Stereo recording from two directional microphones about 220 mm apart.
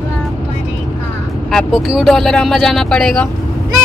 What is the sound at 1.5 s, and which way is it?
Speech, centre (ahead or behind).